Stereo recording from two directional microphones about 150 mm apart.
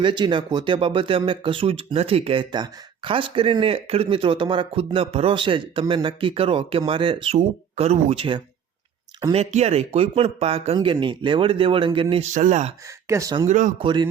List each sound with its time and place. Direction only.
0.0 s speech: 30° right (ahead or behind)
9.3 s speech: 45° right (ahead or behind)
10.8 s speech: 30° right (ahead or behind)
12.3 s speech: 55° right (ahead or behind)
13.1 s speech: 20° right (ahead or behind)
13.5 s speech: 60° right (ahead or behind)
13.8 s speech: 30° right (ahead or behind)